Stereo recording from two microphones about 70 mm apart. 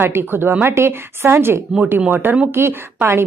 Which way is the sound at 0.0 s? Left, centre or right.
Right.